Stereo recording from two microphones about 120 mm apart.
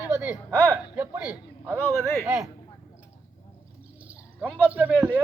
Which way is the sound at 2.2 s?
5° right (ahead or behind).